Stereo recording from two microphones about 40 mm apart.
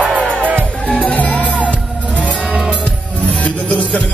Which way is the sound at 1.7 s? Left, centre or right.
Left.